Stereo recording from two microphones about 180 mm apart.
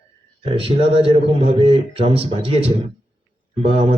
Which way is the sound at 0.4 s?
30° right (ahead or behind).